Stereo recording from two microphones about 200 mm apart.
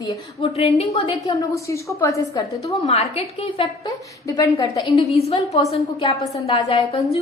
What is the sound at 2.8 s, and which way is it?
A woman's voice, 30° left (ahead or behind).